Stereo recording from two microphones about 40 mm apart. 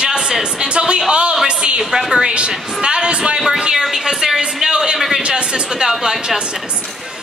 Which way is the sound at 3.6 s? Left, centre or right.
Centre.